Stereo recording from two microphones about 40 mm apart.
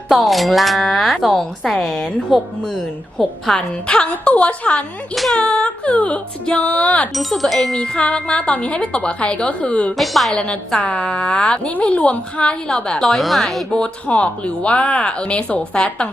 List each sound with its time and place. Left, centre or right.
0.1 s speech: centre
2.3 s speech: centre
2.7 s a woman's voice: centre; by 7.1 s left
7.1 s speech: centre
7.8 s a woman's voice: left
10.0 s speech: centre
10.3 s a woman's voice: left
10.8 s a woman's voice: left
13.1 s speech: centre
13.7 s a woman's voice: left